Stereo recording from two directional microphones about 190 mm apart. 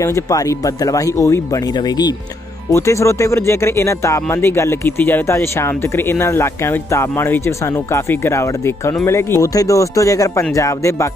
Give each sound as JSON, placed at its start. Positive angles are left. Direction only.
{"t": 0.0, "sound": "speech", "side_deg": 15}